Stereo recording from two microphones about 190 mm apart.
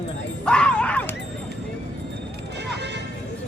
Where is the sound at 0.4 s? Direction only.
5° left (ahead or behind).